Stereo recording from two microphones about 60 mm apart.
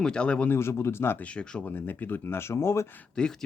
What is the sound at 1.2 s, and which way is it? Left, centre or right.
Speech, centre.